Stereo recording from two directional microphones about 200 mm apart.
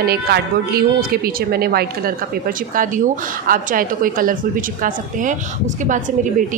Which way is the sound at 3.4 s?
45° right (ahead or behind).